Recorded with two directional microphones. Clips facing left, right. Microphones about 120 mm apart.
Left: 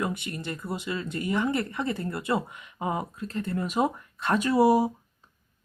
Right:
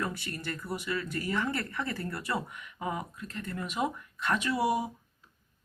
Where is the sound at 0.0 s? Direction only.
20° left (ahead or behind).